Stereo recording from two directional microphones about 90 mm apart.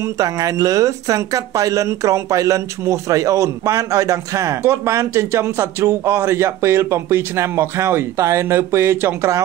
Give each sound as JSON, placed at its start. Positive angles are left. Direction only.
{"t": 0.0, "sound": "speech", "side_deg": -40}